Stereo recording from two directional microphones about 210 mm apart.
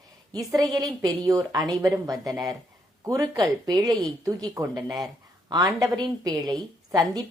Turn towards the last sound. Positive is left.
turn(degrees=-20)  # may be behind; listen again after turning